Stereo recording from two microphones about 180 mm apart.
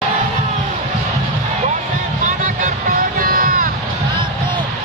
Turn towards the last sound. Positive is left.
turn(degrees=-50)  # may be behind; listen again after turning